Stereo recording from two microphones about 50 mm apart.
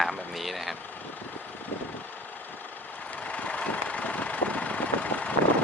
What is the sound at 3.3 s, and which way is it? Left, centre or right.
Vehicle, left.